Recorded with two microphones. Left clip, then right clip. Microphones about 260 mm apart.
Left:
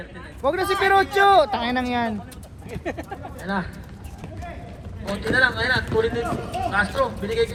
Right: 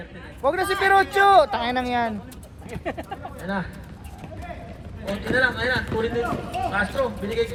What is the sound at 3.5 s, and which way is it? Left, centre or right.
Speech, left.